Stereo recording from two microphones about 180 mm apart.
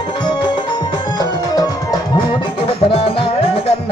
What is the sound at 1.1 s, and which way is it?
Music, 20° left (ahead or behind).